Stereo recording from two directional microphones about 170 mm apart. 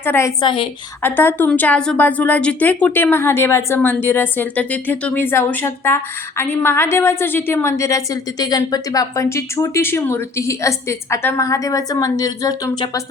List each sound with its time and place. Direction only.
0.0 s a woman's voice: 15° left (ahead or behind)
0.4 s a woman's voice: 30° left (ahead or behind)
1.0 s a woman's voice: 10° left (ahead or behind)